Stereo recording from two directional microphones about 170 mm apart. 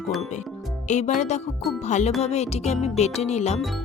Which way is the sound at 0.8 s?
45° left (ahead or behind).